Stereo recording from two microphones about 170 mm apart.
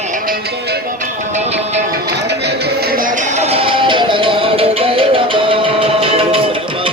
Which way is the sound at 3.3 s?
35° right (ahead or behind).